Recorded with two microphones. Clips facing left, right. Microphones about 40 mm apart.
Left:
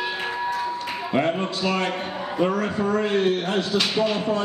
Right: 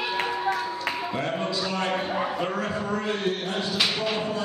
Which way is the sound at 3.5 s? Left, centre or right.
Left.